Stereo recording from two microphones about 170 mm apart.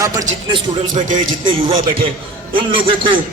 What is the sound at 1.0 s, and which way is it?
Speech, 50° right (ahead or behind).